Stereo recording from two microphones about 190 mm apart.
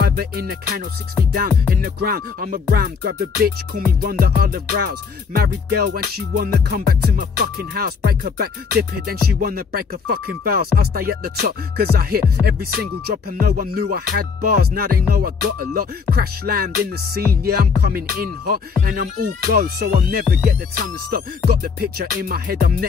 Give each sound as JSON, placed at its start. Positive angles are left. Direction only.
{"t": 0.0, "sound": "music", "side_deg": -55}
{"t": 21.5, "sound": "music", "side_deg": -55}